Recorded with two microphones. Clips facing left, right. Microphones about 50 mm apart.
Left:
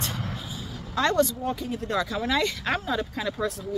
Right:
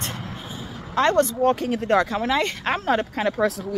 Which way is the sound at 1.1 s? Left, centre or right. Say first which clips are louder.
Right 3 dB; right.